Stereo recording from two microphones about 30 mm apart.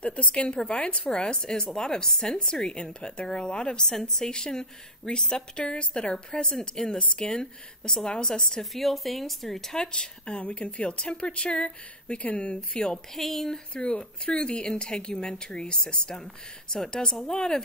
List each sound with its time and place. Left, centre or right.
0.0 s a woman's voice: left
1.1 s a woman's voice: left
8.7 s speech: centre
9.8 s a woman's voice: left
10.4 s a woman's voice: left
12.7 s a woman's voice: left
13.1 s speech: centre
13.7 s a woman's voice: left
16.7 s a woman's voice: left